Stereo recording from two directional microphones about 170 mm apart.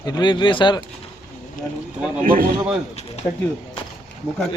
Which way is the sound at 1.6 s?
50° left (ahead or behind).